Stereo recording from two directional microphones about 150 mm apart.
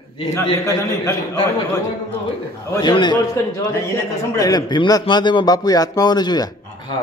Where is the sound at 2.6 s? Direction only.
20° left (ahead or behind).